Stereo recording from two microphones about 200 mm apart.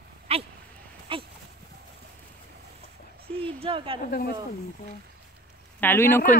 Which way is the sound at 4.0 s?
50° left (ahead or behind).